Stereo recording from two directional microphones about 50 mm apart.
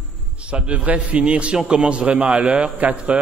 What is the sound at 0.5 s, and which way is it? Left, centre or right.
A man's voice, right.